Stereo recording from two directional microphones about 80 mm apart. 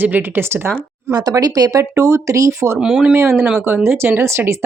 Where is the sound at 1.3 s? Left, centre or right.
Right.